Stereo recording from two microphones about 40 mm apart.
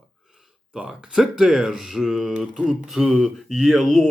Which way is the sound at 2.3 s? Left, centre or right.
Right.